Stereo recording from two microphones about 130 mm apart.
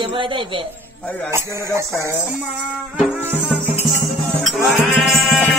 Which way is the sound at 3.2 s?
15° right (ahead or behind).